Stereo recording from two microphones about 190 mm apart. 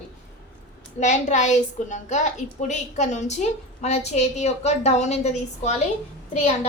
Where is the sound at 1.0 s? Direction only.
40° left (ahead or behind).